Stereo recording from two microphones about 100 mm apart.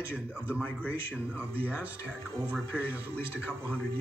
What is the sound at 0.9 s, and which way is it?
Speech, 15° right (ahead or behind).